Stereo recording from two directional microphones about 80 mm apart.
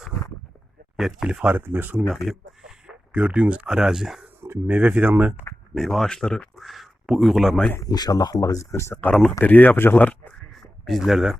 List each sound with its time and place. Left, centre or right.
0.9 s speech: centre; by 2.0 s right
2.2 s speech: centre
4.4 s speech: right
5.7 s speech: centre
7.8 s speech: left
8.7 s speech: left
9.4 s speech: left
10.5 s a sound: centre